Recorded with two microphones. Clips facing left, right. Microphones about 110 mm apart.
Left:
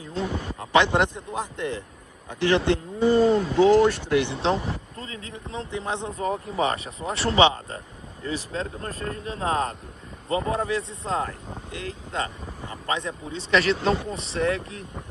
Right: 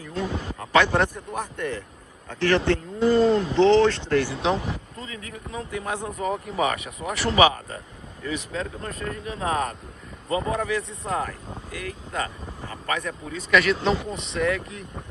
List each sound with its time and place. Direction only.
0.7 s speech: 20° left (ahead or behind)
4.3 s speech: 30° left (ahead or behind)